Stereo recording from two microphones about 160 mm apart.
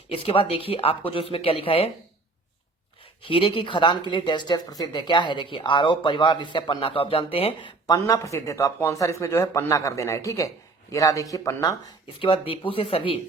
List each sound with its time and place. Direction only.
0.1 s speech: 35° left (ahead or behind)
3.0 s speech: 35° left (ahead or behind)
7.9 s speech: 20° left (ahead or behind)
12.2 s speech: 35° left (ahead or behind)